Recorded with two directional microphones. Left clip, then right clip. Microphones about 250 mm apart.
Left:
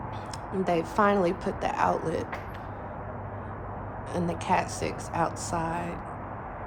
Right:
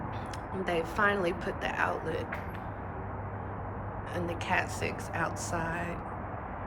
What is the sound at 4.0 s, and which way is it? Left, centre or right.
A woman's voice, centre.